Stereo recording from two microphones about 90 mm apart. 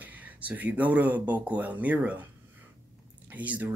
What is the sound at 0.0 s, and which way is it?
Speech, 15° right (ahead or behind).